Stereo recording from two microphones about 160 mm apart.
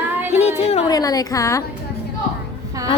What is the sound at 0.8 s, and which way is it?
Speech, 25° left (ahead or behind).